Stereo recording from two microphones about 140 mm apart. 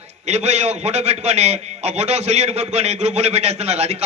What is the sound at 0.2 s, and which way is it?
A man's voice, 50° right (ahead or behind).